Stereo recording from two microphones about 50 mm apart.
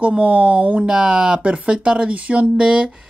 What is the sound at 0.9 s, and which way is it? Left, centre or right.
Speech, centre.